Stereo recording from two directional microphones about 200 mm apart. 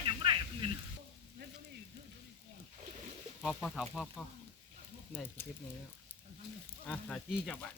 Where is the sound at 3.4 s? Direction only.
Centre (ahead or behind).